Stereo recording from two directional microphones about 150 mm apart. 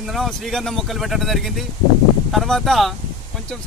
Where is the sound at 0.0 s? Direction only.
Centre (ahead or behind).